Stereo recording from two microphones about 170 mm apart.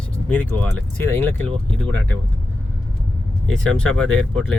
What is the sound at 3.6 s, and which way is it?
Speech, 5° left (ahead or behind).